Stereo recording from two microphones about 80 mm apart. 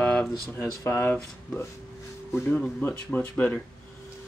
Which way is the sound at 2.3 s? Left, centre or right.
Left.